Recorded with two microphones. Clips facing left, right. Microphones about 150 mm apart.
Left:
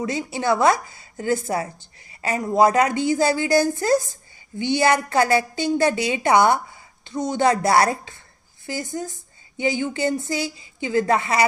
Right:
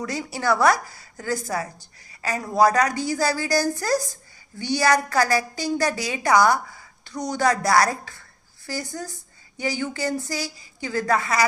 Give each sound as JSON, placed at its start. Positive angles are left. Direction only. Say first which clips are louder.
{"t": 0.0, "sound": "a woman's voice", "louder": "left 2 dB", "side_deg": 20}